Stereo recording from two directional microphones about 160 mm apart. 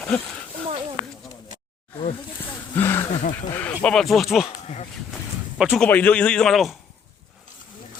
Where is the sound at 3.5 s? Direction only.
10° left (ahead or behind).